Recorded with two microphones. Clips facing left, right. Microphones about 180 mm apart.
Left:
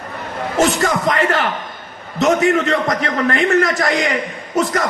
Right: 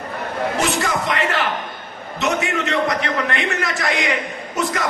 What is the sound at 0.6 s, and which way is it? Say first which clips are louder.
A man's voice: left 9 dB; 45° left (ahead or behind).